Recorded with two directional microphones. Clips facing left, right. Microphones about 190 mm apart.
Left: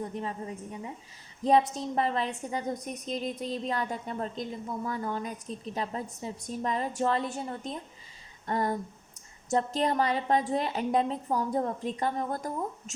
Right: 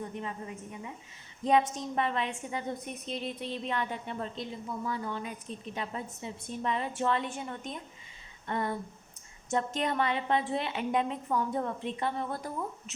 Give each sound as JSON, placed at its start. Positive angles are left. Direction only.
{"t": 0.0, "sound": "a woman's voice", "side_deg": 35}